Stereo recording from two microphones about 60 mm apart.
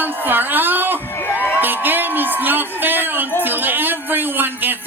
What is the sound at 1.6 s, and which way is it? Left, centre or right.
A man's voice, right.